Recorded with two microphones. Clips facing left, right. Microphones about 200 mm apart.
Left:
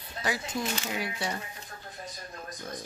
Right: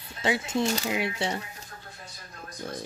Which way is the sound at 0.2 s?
25° right (ahead or behind).